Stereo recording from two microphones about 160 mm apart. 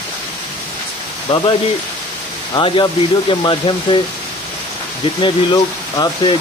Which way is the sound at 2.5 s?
30° left (ahead or behind).